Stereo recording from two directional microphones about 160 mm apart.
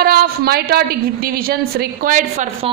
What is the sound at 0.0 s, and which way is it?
A woman's voice, 75° right (ahead or behind).